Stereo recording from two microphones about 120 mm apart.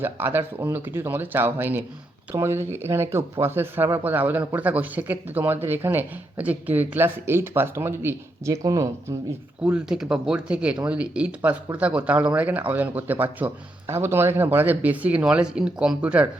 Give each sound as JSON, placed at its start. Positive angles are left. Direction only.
{"t": 0.0, "sound": "speech", "side_deg": -15}
{"t": 9.7, "sound": "speech", "side_deg": -5}